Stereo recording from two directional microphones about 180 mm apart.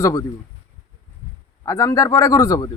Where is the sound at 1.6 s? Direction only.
20° left (ahead or behind).